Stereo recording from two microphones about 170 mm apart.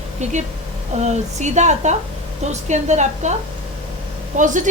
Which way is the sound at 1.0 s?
45° right (ahead or behind).